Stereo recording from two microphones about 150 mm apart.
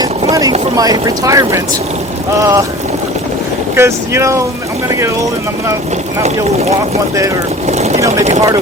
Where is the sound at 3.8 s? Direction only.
20° right (ahead or behind).